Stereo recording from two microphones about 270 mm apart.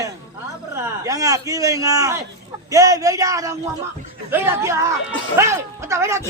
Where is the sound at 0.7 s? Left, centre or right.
Centre.